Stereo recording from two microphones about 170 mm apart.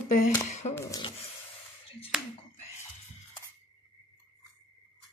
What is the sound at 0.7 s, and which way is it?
Speech, 15° left (ahead or behind).